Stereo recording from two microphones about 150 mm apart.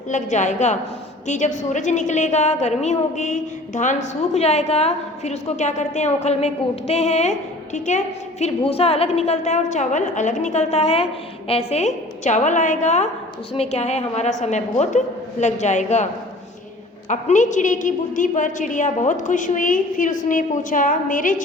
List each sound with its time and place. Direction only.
0.1 s a woman's voice: 55° left (ahead or behind)
17.1 s a woman's voice: 55° left (ahead or behind)